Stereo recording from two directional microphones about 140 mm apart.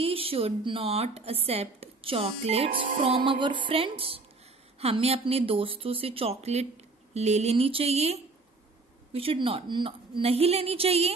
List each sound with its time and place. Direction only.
0.0 s speech: 40° right (ahead or behind)